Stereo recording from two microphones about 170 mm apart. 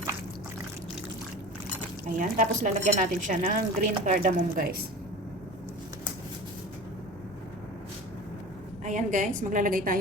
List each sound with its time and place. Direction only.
2.1 s speech: 50° right (ahead or behind)
8.8 s speech: 45° right (ahead or behind)